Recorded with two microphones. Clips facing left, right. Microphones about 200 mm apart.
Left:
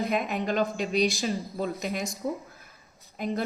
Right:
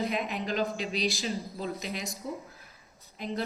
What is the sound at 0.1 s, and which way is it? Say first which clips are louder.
Speech: left 4 dB; 50° left (ahead or behind).